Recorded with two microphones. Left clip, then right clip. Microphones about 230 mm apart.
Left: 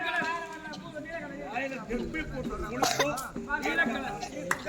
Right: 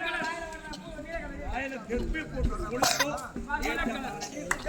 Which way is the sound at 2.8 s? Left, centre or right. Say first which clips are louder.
Right 1 dB; right.